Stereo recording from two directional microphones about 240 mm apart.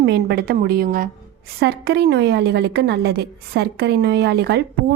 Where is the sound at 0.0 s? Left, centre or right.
Right.